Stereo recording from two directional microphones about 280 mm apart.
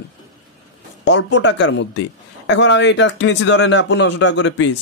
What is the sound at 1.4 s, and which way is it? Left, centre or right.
A man's voice, left.